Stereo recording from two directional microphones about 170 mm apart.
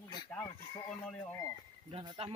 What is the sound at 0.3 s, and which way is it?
Speech, 5° left (ahead or behind).